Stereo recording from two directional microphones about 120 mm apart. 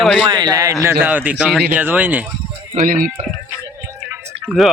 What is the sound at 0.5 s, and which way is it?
A man's voice, 25° right (ahead or behind).